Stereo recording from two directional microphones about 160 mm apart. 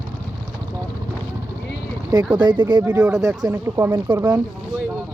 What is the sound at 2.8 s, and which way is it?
Speech, 5° right (ahead or behind).